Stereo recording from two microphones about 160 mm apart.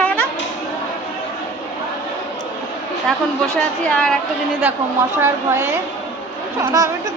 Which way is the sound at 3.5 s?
5° left (ahead or behind).